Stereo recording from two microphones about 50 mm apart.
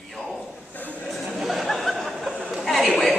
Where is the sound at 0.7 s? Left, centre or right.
Left.